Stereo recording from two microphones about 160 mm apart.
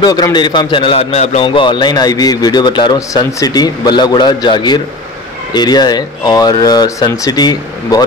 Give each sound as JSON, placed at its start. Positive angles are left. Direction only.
{"t": 0.0, "sound": "a man's voice", "side_deg": 25}